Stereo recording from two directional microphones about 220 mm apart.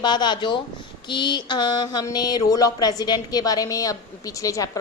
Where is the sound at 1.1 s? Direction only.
20° left (ahead or behind).